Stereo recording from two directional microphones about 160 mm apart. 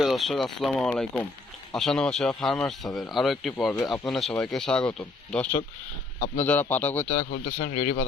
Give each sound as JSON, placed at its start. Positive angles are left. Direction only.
{"t": 0.0, "sound": "speech", "side_deg": 0}
{"t": 6.1, "sound": "a man's voice", "side_deg": 50}
{"t": 6.4, "sound": "speech", "side_deg": 10}
{"t": 7.0, "sound": "speech", "side_deg": 50}